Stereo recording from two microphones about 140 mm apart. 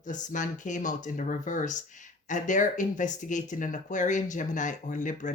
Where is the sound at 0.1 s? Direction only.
65° left (ahead or behind).